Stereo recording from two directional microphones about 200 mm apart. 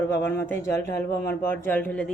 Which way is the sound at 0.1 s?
10° left (ahead or behind).